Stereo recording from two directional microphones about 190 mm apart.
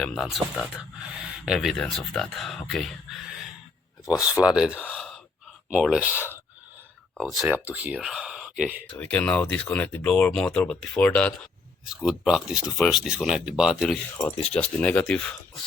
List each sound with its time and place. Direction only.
0.0 s speech: 5° left (ahead or behind)
4.8 s gasp: 5° left (ahead or behind)
5.7 s speech: 5° right (ahead or behind)
6.1 s speech: 10° left (ahead or behind)
7.2 s speech: centre (ahead or behind)
8.9 s speech: 5° left (ahead or behind)